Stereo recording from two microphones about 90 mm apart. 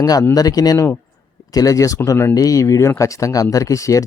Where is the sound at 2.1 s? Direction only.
25° left (ahead or behind).